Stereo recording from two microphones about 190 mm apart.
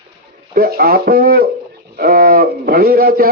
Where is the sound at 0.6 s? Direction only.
50° right (ahead or behind).